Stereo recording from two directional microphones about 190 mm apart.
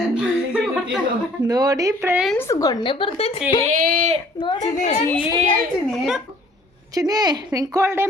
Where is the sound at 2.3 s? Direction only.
15° left (ahead or behind); by 3.4 s 30° left (ahead or behind).